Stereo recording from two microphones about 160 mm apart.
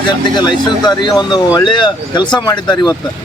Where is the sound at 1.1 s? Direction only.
25° left (ahead or behind).